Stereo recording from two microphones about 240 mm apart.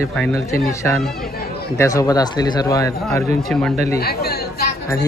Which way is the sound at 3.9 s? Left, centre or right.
Left.